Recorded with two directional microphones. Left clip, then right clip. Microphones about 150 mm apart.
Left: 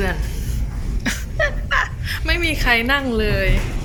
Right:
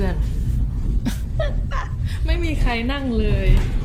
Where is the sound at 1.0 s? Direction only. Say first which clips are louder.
Left 7 dB; 10° right (ahead or behind).